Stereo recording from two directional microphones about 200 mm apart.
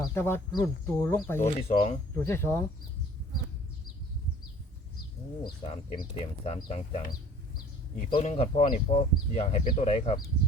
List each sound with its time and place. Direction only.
0.1 s speech: 10° left (ahead or behind)
1.4 s speech: 35° left (ahead or behind)
2.2 s speech: 10° left (ahead or behind)
5.4 s speech: 25° left (ahead or behind)